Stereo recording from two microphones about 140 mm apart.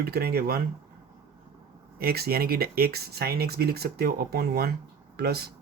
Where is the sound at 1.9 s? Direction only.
90° right.